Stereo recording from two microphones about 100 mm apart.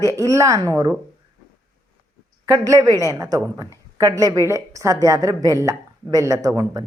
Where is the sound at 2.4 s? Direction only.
35° right (ahead or behind).